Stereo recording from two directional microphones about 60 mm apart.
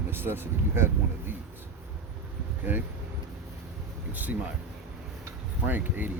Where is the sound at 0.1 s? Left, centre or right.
Right.